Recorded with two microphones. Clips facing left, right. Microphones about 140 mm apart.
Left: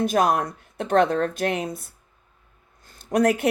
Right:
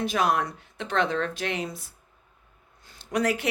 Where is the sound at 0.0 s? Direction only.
45° left (ahead or behind).